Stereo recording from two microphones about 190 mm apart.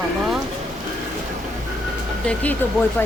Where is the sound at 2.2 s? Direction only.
5° left (ahead or behind).